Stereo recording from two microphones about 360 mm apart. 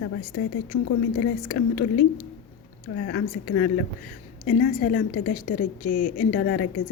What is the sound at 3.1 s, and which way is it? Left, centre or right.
Speech, left.